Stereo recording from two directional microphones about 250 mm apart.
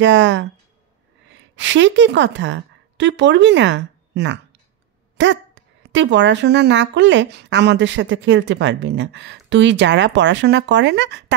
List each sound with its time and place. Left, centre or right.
0.0 s a woman's voice: right